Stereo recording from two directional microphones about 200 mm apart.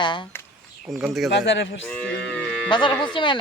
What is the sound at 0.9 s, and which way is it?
Speech, centre (ahead or behind).